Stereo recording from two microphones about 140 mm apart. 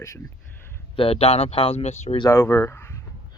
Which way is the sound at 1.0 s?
45° left (ahead or behind).